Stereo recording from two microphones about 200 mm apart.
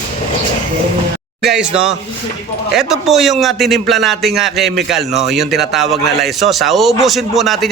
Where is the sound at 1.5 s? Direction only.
5° right (ahead or behind).